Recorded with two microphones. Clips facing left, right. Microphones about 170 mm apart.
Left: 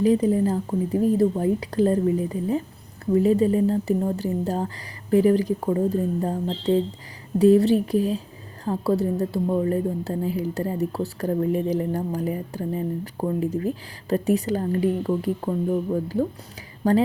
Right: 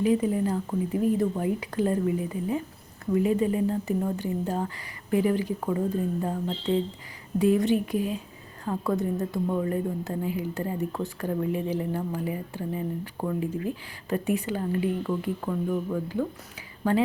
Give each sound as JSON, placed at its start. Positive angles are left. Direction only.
{"t": 0.0, "sound": "a woman's voice", "side_deg": 35}